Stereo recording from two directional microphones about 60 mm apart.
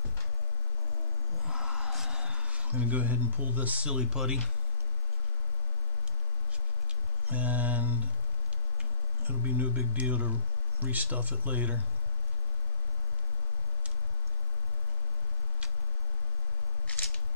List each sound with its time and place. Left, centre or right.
1.4 s music: centre
2.7 s speech: right; by 4.4 s centre
7.2 s speech: right
9.2 s speech: right
16.8 s camera: left